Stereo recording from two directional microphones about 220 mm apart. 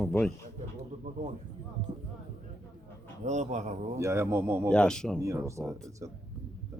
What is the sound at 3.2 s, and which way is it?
Speech, 30° right (ahead or behind).